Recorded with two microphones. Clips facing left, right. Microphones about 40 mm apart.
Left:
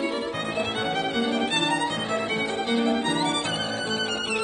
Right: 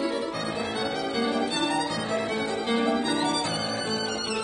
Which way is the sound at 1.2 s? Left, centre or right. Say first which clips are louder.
Even; left.